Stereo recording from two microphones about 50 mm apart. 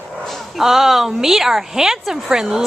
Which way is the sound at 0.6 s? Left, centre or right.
Centre.